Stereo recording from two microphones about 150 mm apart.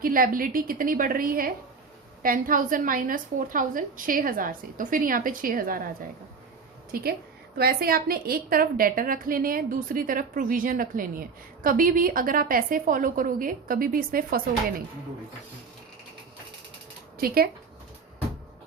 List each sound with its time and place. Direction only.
0.0 s a woman's voice: 70° right (ahead or behind)
6.9 s a woman's voice: 90° right; by 14.4 s 75° right (ahead or behind)
17.2 s speech: 85° right